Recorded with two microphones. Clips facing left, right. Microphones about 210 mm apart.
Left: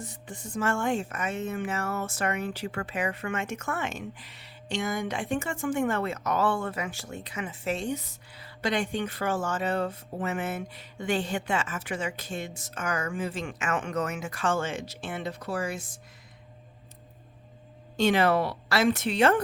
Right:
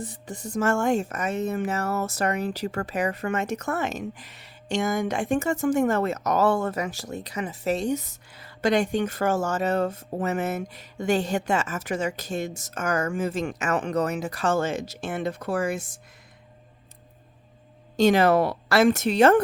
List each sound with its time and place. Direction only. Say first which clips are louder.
0.0 s speech: right 5 dB; 35° right (ahead or behind)
17.9 s a woman's voice: right 5 dB; 40° right (ahead or behind)